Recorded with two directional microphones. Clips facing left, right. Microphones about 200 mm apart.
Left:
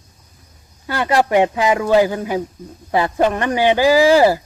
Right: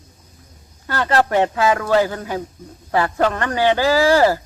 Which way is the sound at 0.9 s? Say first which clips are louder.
Left 2 dB; 15° left (ahead or behind).